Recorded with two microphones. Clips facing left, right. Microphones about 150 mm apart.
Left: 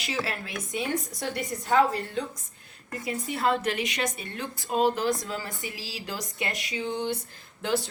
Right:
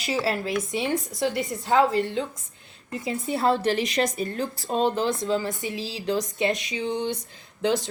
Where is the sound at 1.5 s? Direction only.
25° right (ahead or behind).